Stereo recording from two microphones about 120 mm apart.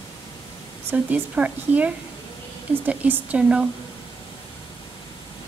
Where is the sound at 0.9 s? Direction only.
10° right (ahead or behind).